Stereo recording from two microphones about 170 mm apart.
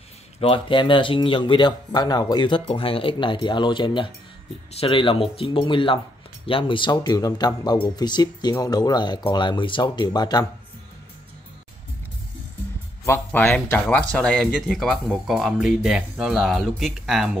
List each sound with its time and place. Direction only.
0.4 s speech: 30° left (ahead or behind)
13.0 s speech: 10° left (ahead or behind); by 17.4 s 5° right (ahead or behind)